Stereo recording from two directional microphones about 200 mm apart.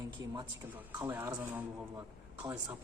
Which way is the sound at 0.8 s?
10° right (ahead or behind).